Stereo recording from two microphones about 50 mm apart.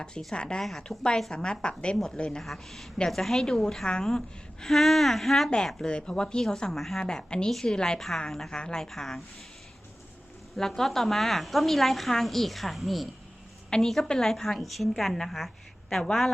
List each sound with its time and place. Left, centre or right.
0.3 s speech: centre
0.6 s a woman's voice: centre
0.9 s speech: centre
2.4 s a woman's voice: centre
5.8 s speech: centre
7.0 s speech: centre
10.6 s a woman's voice: centre